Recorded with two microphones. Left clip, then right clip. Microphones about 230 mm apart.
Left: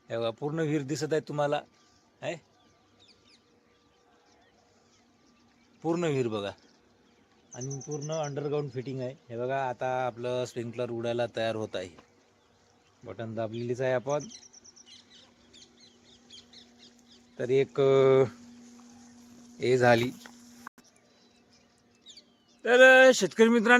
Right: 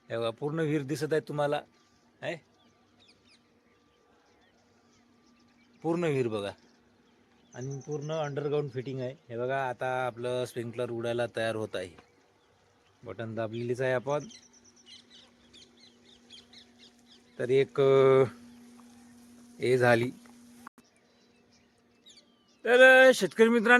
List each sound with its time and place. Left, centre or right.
0.1 s speech: centre
5.8 s speech: centre
7.6 s speech: left
7.9 s speech: centre
13.1 s speech: centre
14.4 s insect: centre
14.8 s bird: centre
17.3 s speech: centre
19.5 s speech: centre
20.7 s a sound: centre
22.6 s speech: centre